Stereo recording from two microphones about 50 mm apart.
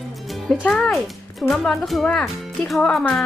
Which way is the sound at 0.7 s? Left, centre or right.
Centre.